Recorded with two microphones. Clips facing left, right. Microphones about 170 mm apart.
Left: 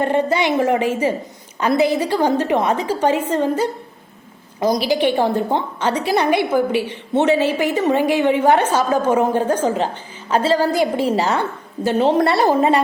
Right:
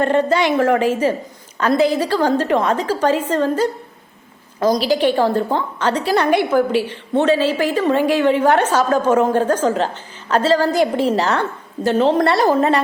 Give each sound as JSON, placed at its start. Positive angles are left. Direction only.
{"t": 0.0, "sound": "a woman's voice", "side_deg": 15}